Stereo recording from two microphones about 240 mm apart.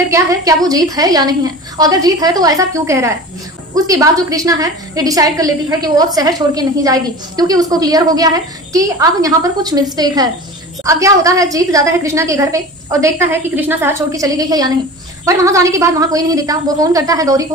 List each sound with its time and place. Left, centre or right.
0.1 s a woman's voice: centre